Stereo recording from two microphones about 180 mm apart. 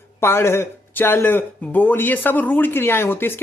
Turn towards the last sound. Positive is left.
turn(degrees=10)  # may be behind; listen again after turning